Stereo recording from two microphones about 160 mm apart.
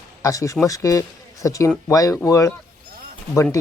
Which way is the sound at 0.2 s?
20° left (ahead or behind).